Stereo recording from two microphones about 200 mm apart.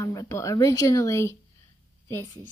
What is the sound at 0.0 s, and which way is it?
A woman's voice, 15° left (ahead or behind).